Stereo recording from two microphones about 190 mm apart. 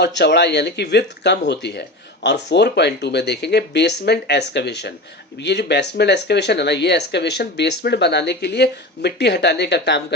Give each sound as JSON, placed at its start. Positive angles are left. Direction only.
{"t": 0.0, "sound": "speech", "side_deg": 60}